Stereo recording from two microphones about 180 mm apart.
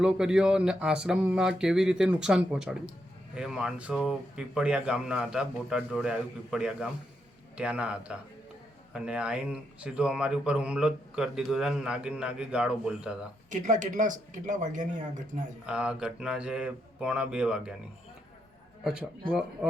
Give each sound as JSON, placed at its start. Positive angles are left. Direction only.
{"t": 0.0, "sound": "a man's voice", "side_deg": -5}
{"t": 13.5, "sound": "speech", "side_deg": -45}
{"t": 15.6, "sound": "speech", "side_deg": -5}